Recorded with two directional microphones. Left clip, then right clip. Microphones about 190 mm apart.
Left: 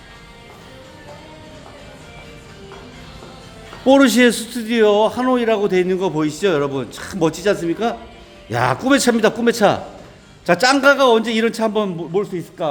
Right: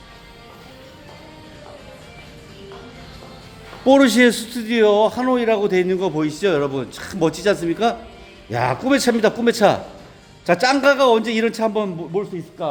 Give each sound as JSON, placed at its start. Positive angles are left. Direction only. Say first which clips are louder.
{"t": 3.8, "sound": "a man's voice", "louder": "left 1 dB", "side_deg": 0}
{"t": 8.4, "sound": "a man's voice", "louder": "left 2 dB", "side_deg": 10}